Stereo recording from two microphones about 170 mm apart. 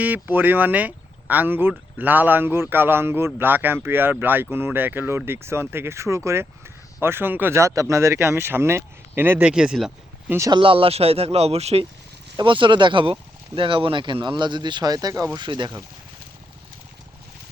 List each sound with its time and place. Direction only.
0.0 s a man's voice: 10° right (ahead or behind)
10.3 s speech: 20° right (ahead or behind)
10.6 s speech: 30° right (ahead or behind)